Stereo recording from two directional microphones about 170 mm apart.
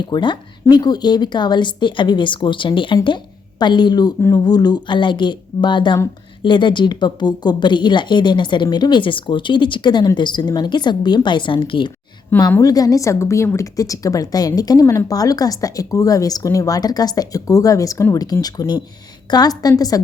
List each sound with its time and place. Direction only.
0.1 s a woman's voice: 25° left (ahead or behind)
12.4 s a woman's voice: 20° left (ahead or behind)